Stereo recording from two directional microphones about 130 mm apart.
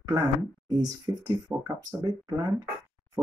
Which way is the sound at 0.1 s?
30° right (ahead or behind).